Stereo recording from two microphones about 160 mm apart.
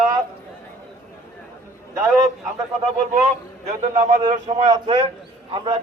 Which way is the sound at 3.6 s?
50° right (ahead or behind).